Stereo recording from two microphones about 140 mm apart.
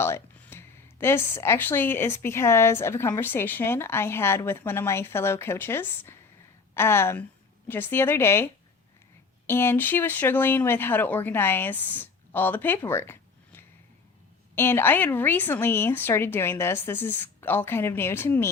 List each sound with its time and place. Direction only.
0.0 s a woman's voice: 15° left (ahead or behind)
9.5 s a woman's voice: 15° left (ahead or behind)